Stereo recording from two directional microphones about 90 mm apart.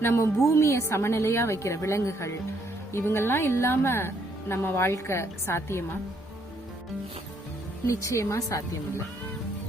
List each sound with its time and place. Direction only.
0.0 s a woman's voice: 30° left (ahead or behind)
7.9 s a woman's voice: 35° left (ahead or behind)